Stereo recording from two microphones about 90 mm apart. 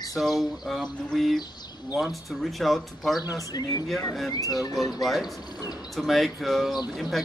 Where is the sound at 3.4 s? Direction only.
45° left (ahead or behind).